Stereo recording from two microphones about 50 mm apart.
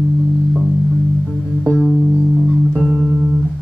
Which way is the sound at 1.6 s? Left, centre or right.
Centre.